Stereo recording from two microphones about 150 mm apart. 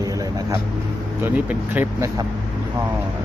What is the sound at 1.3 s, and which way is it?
Speech, 10° right (ahead or behind).